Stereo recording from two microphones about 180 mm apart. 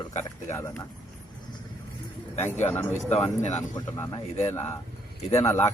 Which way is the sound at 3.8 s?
20° left (ahead or behind).